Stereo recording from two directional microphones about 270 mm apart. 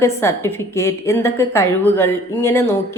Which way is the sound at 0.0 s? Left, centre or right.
Centre.